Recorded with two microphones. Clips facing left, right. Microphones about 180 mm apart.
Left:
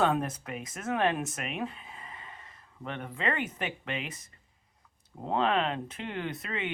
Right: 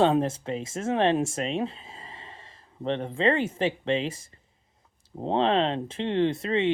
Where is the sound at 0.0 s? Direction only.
25° right (ahead or behind).